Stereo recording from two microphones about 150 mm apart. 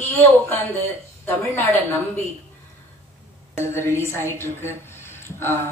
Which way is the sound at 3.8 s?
15° left (ahead or behind).